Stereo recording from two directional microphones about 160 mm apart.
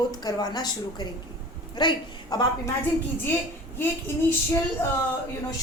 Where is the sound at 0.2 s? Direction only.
25° left (ahead or behind).